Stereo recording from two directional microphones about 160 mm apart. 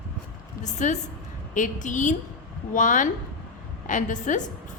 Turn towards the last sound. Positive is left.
turn(degrees=50)  # may be behind; listen again after turning